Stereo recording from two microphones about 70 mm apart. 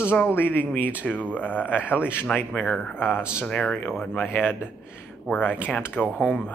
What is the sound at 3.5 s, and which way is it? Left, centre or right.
Speech, centre.